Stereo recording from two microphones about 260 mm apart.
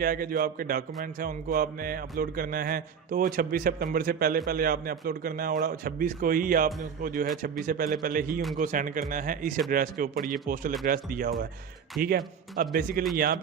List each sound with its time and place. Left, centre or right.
0.0 s speech: right